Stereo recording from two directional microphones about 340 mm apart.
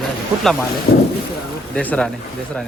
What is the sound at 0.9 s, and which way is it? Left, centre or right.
Speech, left.